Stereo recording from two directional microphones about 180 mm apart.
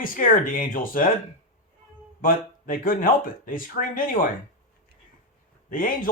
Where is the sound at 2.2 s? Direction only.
50° left (ahead or behind).